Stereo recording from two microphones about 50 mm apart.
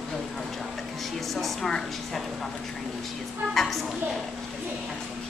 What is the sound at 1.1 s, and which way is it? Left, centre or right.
A woman's voice, centre.